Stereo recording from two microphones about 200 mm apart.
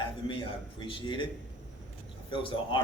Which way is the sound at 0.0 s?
25° left (ahead or behind).